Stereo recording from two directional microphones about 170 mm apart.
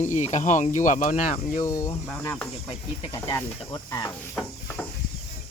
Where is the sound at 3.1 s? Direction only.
20° left (ahead or behind).